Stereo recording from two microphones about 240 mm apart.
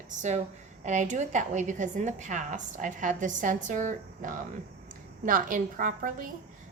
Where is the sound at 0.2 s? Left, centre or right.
Right.